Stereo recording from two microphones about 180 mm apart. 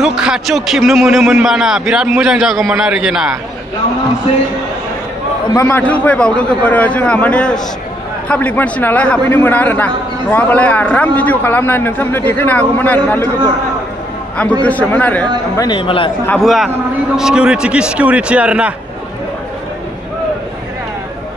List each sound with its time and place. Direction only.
0.0 s a man's voice: 5° right (ahead or behind)
5.5 s a man's voice: 15° left (ahead or behind)
14.6 s a man's voice: 10° left (ahead or behind)
15.5 s speech: 25° left (ahead or behind)
16.3 s a man's voice: centre (ahead or behind)